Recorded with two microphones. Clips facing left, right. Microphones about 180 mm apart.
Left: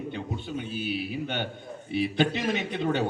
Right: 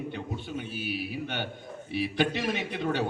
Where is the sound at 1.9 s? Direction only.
20° left (ahead or behind).